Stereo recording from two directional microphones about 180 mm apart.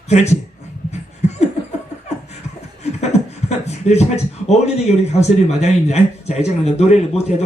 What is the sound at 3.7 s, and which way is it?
A man's voice, 40° left (ahead or behind).